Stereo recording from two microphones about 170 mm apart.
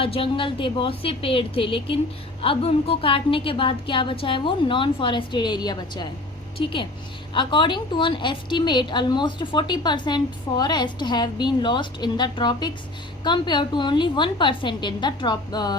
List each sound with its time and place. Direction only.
0.0 s a woman's voice: 35° left (ahead or behind)